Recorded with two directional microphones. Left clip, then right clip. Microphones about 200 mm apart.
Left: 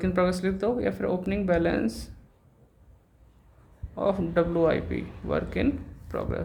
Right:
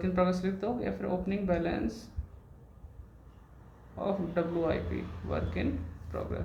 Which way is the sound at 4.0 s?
55° left (ahead or behind).